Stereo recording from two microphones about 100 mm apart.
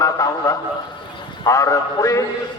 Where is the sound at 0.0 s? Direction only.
35° left (ahead or behind).